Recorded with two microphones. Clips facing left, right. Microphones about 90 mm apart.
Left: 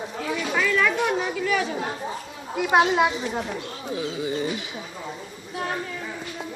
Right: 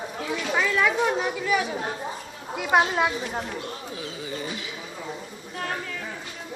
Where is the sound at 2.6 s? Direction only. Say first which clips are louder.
Left 3 dB; 10° left (ahead or behind).